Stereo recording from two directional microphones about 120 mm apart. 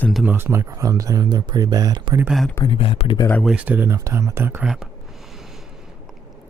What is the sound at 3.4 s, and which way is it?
Speech, 10° right (ahead or behind).